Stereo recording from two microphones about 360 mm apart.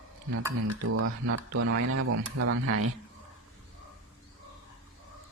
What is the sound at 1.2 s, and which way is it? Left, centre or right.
Speech, right.